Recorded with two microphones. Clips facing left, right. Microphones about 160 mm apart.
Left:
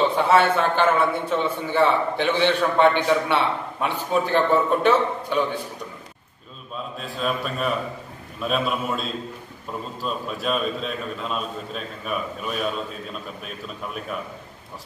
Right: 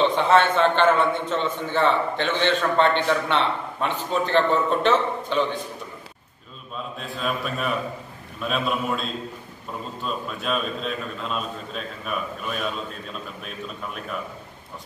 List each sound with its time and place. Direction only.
0.1 s a man's voice: 10° left (ahead or behind)
7.0 s a man's voice: centre (ahead or behind)